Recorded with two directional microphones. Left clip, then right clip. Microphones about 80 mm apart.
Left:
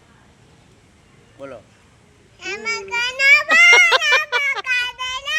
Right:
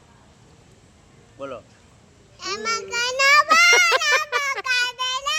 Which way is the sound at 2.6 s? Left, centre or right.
Right.